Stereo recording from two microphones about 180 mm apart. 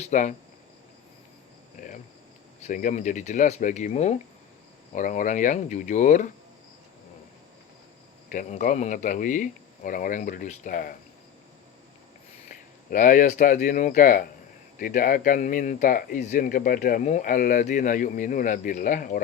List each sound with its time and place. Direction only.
0.0 s speech: 45° left (ahead or behind)
2.6 s speech: 40° left (ahead or behind)
8.3 s speech: 45° left (ahead or behind)
12.5 s speech: 45° left (ahead or behind)